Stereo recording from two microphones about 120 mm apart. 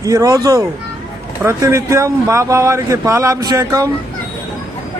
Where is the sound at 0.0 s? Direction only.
30° right (ahead or behind).